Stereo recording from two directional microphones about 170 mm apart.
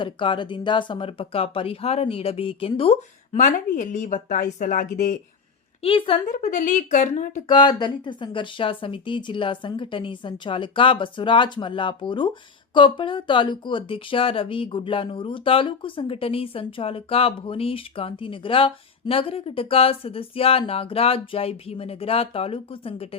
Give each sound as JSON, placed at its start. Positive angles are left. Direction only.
{"t": 0.0, "sound": "speech", "side_deg": 30}
{"t": 3.3, "sound": "speech", "side_deg": 50}
{"t": 5.8, "sound": "speech", "side_deg": 30}
{"t": 6.2, "sound": "speech", "side_deg": 50}
{"t": 7.4, "sound": "speech", "side_deg": 25}